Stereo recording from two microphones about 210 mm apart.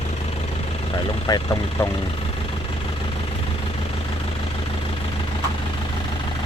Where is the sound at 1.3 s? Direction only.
20° left (ahead or behind).